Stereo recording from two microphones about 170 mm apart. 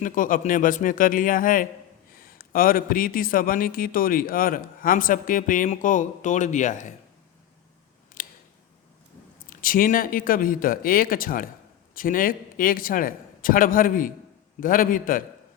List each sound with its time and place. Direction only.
0.0 s a man's voice: 50° left (ahead or behind)
8.2 s scissors: 55° left (ahead or behind)
9.5 s a man's voice: 55° left (ahead or behind)